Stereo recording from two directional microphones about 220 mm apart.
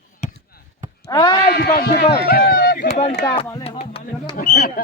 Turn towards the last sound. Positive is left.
turn(degrees=40)  # may be behind; listen again after turning